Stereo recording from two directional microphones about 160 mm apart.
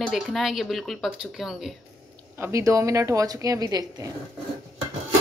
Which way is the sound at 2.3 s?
15° right (ahead or behind).